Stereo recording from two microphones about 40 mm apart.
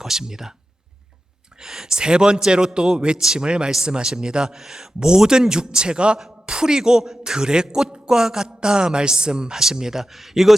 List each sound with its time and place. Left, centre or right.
0.0 s speech: centre
1.5 s a man's voice: centre